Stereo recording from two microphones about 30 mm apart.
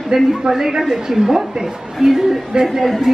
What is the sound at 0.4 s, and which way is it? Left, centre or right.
A woman's voice, centre.